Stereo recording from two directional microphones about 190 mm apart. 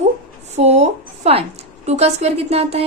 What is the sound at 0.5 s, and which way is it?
A woman's voice, 35° right (ahead or behind).